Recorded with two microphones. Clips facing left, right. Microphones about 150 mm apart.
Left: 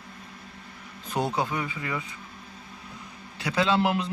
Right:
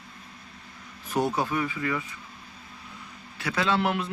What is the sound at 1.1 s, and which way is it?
Speech, 15° left (ahead or behind).